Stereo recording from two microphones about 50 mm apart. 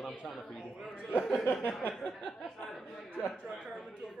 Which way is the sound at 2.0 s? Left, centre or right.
Centre.